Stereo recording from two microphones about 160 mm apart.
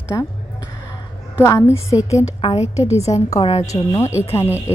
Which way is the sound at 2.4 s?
35° left (ahead or behind).